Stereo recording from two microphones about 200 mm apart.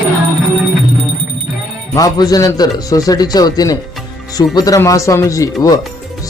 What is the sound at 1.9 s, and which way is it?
A man's voice, 20° left (ahead or behind).